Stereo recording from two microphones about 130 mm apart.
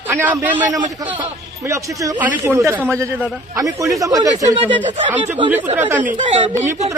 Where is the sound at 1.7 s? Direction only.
25° right (ahead or behind).